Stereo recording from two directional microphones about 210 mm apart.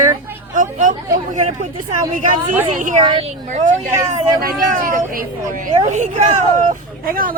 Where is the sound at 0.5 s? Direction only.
40° right (ahead or behind).